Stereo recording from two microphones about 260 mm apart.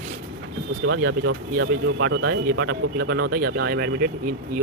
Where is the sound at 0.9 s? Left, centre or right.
Right.